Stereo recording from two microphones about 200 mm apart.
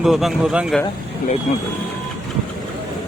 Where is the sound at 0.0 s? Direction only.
Centre (ahead or behind).